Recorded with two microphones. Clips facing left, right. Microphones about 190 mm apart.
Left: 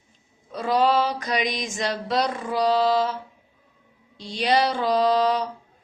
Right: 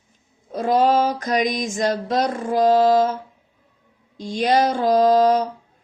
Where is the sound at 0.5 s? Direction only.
45° right (ahead or behind).